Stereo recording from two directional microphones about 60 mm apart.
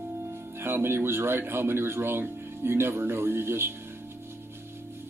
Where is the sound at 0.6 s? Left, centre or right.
Right.